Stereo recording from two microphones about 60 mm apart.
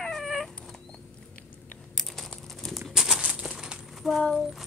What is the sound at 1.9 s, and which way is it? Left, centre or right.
Typing, centre.